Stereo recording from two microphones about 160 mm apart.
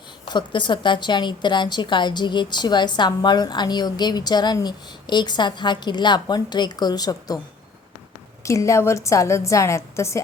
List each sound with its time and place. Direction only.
0.3 s a woman's voice: 30° left (ahead or behind)
8.4 s a woman's voice: 20° left (ahead or behind)